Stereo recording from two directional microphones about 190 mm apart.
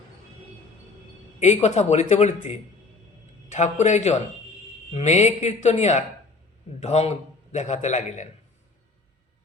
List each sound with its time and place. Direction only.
1.4 s speech: 35° left (ahead or behind)